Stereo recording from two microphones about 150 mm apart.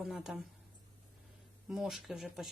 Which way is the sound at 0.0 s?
Centre (ahead or behind).